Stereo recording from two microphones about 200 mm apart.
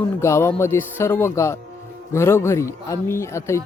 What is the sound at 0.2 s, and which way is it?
A man's voice, 15° left (ahead or behind).